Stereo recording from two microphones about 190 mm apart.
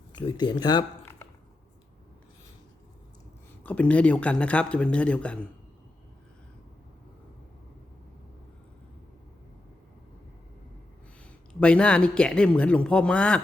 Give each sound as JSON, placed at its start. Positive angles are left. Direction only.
{"t": 0.1, "sound": "speech", "side_deg": 25}
{"t": 3.6, "sound": "speech", "side_deg": 5}
{"t": 11.6, "sound": "a man's voice", "side_deg": 5}